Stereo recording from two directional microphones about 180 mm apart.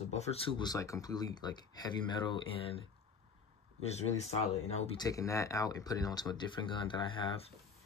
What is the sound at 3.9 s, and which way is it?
Speech, 35° left (ahead or behind).